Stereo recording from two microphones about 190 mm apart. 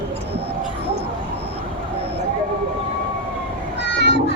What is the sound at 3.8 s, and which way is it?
Meow, 65° left (ahead or behind).